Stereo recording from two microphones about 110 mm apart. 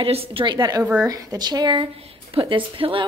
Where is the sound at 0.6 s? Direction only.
35° right (ahead or behind).